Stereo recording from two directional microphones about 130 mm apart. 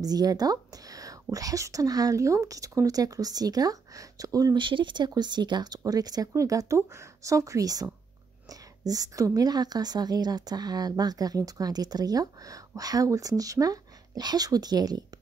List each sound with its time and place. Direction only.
0.0 s a woman's voice: 30° right (ahead or behind)
4.6 s a woman's voice: 40° right (ahead or behind)